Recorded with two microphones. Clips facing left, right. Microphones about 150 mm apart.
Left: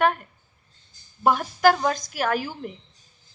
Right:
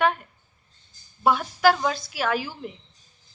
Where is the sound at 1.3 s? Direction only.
45° left (ahead or behind).